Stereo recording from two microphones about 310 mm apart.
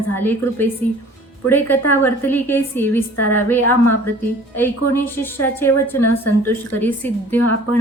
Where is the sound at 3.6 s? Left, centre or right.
Left.